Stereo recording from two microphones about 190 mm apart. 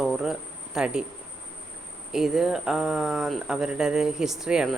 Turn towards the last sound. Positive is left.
turn(degrees=-5)  # may be behind; listen again after turning